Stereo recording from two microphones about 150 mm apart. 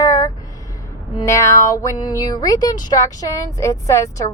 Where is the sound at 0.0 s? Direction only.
25° left (ahead or behind).